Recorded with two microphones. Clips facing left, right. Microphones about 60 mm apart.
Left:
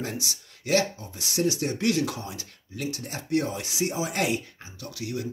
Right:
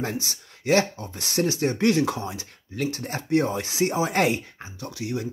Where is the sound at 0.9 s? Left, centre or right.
Right.